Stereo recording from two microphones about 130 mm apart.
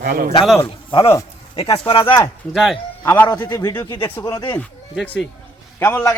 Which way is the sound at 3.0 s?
15° left (ahead or behind).